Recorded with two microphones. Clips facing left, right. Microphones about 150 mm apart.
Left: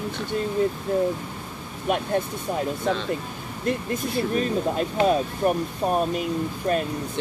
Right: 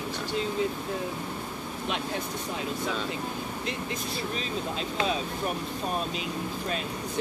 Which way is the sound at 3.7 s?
50° left (ahead or behind).